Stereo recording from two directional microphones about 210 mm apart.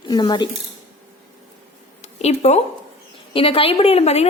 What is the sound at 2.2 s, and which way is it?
A woman's voice, 30° left (ahead or behind).